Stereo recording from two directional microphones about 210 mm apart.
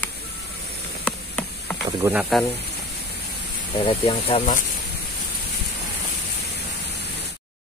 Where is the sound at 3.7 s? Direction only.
25° left (ahead or behind).